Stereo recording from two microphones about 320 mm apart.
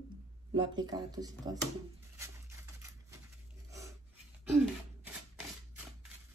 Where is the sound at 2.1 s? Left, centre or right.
Centre.